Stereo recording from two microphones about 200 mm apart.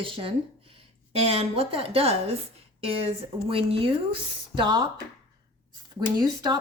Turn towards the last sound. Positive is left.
turn(degrees=-20)  # may be behind; listen again after turning